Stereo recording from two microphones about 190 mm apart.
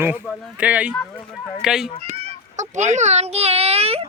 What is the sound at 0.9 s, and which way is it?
Speech, 10° left (ahead or behind).